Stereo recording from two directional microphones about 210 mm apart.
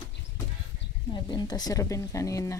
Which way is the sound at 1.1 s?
20° left (ahead or behind).